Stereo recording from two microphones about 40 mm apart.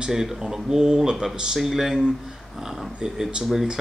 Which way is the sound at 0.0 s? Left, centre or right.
Centre.